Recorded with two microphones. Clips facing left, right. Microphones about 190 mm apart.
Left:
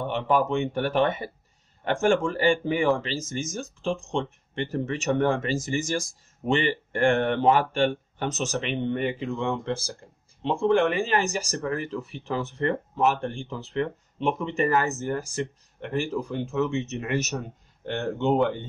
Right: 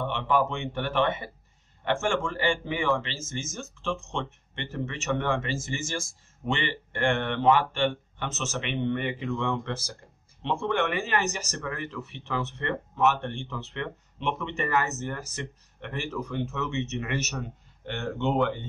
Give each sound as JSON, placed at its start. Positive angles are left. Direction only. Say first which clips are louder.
{"t": 0.0, "sound": "speech", "louder": "left 2 dB", "side_deg": 40}